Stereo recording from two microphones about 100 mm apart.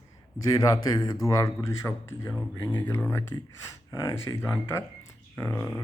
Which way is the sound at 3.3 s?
35° left (ahead or behind).